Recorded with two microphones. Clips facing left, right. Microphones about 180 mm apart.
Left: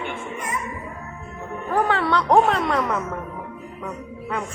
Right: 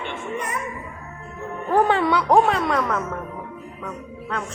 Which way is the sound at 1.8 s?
15° right (ahead or behind).